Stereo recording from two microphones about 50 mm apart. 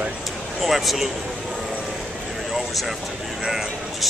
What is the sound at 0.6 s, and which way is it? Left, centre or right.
Speech, centre.